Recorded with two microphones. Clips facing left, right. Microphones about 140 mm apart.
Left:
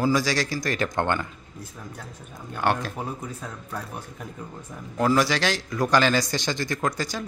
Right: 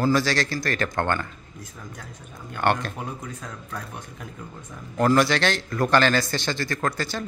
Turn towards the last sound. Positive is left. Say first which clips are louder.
# even
turn(degrees=10)  # may be behind; listen again after turning